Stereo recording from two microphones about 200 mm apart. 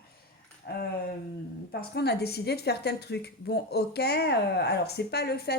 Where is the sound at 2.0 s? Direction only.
55° left (ahead or behind).